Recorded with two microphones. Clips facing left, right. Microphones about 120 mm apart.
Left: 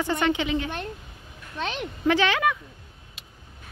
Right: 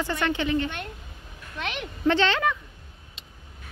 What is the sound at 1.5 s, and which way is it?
Speech, 30° left (ahead or behind).